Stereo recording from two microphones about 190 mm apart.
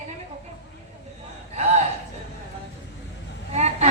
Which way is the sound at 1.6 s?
35° right (ahead or behind).